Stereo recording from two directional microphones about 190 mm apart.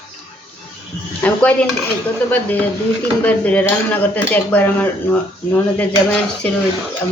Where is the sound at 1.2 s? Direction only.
5° left (ahead or behind).